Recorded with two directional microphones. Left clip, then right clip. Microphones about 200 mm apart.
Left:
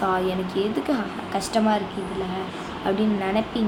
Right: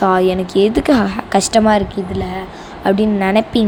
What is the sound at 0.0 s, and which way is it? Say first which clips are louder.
A woman's voice: right 10 dB; 35° right (ahead or behind).